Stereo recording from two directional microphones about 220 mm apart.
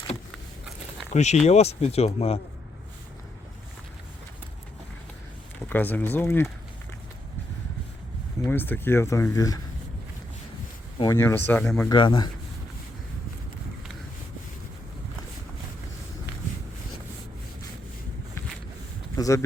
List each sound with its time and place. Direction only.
1.1 s speech: 30° left (ahead or behind)
5.6 s speech: 10° left (ahead or behind)
8.4 s speech: 10° left (ahead or behind)
10.9 s speech: 15° left (ahead or behind)
11.9 s speech: 20° left (ahead or behind)
19.1 s speech: 15° left (ahead or behind)